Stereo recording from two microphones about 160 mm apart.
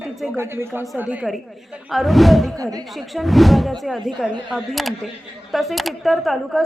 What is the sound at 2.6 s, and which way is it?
Speech, 25° right (ahead or behind).